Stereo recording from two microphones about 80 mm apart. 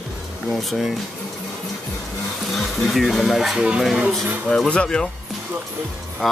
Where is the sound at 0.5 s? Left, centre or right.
Centre.